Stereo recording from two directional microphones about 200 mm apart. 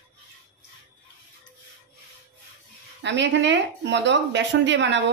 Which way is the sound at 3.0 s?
60° right (ahead or behind).